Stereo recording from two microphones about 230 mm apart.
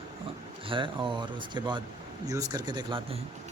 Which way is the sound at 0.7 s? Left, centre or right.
Right.